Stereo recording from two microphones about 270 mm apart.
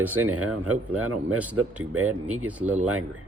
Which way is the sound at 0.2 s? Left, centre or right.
Right.